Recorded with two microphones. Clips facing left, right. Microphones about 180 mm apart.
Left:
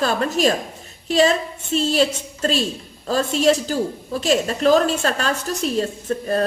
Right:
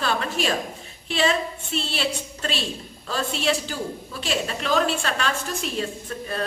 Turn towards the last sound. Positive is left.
turn(degrees=40)  # may be behind; listen again after turning